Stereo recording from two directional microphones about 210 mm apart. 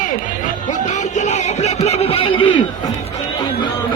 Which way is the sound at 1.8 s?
30° left (ahead or behind).